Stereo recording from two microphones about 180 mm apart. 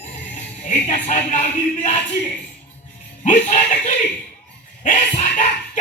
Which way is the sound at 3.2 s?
45° left (ahead or behind).